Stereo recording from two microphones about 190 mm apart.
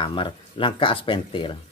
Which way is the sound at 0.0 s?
25° left (ahead or behind).